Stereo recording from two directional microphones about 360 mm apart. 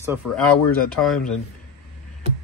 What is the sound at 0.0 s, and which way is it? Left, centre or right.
A man's voice, centre.